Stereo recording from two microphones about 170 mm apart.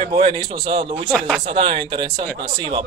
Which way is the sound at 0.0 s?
30° right (ahead or behind).